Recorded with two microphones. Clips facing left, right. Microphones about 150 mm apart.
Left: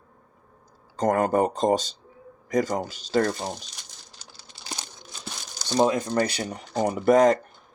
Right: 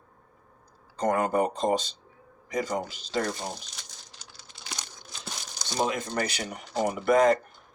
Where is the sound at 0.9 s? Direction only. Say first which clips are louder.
Left 3 dB; 40° left (ahead or behind).